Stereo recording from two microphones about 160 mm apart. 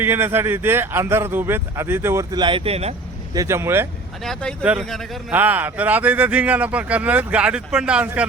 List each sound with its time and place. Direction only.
0.0 s speech: 15° right (ahead or behind); by 2.9 s 40° right (ahead or behind)
3.3 s speech: 15° right (ahead or behind)
4.2 s speech: 5° left (ahead or behind)
4.6 s speech: 10° right (ahead or behind)
5.3 s speech: 10° right (ahead or behind)